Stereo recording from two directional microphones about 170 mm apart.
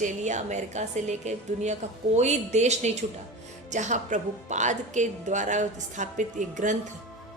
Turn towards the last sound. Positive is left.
turn(degrees=-45)  # may be behind; listen again after turning